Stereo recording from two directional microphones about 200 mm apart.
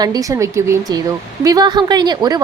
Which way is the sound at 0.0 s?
20° right (ahead or behind).